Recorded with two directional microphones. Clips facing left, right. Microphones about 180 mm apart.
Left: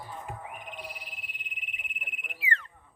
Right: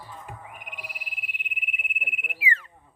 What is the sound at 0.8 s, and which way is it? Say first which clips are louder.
Frog: left 1 dB; 65° right (ahead or behind).